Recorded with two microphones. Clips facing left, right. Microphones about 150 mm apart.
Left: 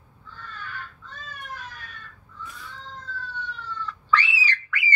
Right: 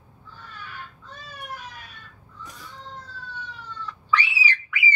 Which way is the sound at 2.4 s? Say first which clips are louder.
Left 2 dB; 40° right (ahead or behind).